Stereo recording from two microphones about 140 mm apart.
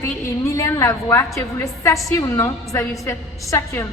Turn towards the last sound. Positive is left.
turn(degrees=20)  # may be behind; listen again after turning